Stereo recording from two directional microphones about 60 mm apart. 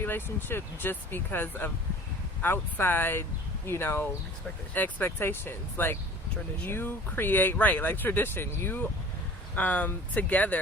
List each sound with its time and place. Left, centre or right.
0.0 s speech: left